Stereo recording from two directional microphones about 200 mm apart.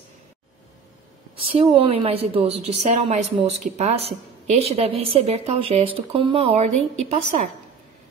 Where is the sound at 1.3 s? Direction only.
30° right (ahead or behind).